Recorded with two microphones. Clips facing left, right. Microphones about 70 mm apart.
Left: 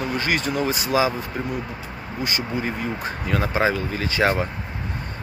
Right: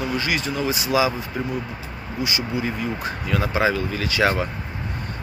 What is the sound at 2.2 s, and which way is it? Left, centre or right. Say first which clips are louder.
Speech: right 1 dB; left.